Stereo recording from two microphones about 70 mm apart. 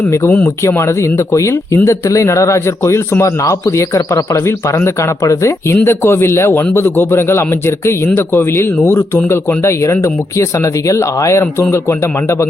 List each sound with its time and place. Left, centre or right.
0.3 s speech: left
0.7 s speech: left
5.8 s a man's voice: left